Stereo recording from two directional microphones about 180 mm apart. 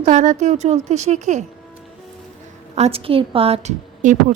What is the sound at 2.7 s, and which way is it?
Speech, 35° right (ahead or behind).